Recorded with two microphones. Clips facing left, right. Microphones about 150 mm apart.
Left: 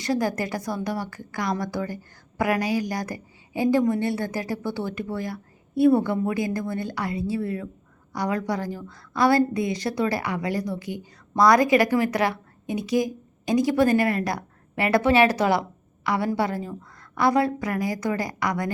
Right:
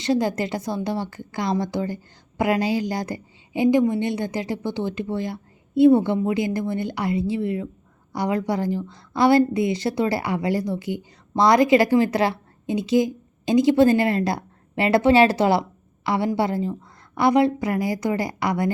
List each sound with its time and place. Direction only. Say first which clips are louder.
0.0 s a woman's voice: right 3 dB; 25° right (ahead or behind)